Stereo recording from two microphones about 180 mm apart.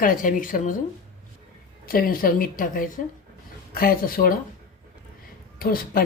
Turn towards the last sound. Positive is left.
turn(degrees=55)  # may be behind; listen again after turning